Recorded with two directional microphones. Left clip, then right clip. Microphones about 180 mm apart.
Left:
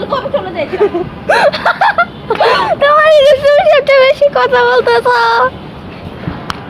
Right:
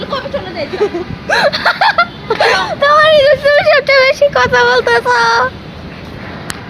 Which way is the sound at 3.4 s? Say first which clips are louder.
Left 2 dB; 5° left (ahead or behind).